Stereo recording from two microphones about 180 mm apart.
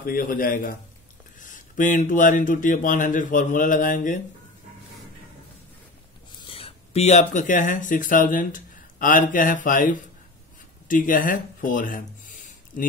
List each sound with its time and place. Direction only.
0.0 s speech: 55° left (ahead or behind)
6.5 s speech: 35° left (ahead or behind); by 12.8 s 50° left (ahead or behind)